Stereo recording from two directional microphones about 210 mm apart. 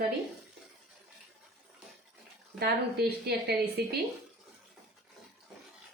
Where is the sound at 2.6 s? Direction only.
50° right (ahead or behind).